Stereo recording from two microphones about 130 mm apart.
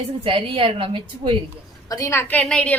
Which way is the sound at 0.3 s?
45° right (ahead or behind).